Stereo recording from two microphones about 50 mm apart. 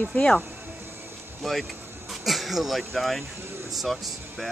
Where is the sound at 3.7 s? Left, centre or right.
Centre.